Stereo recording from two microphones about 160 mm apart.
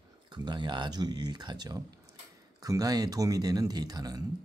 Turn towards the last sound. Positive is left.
turn(degrees=-25)  # may be behind; listen again after turning